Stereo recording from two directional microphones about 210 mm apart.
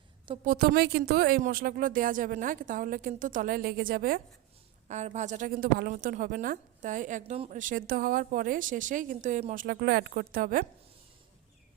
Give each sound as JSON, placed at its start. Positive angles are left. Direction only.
{"t": 0.4, "sound": "a woman's voice", "side_deg": -45}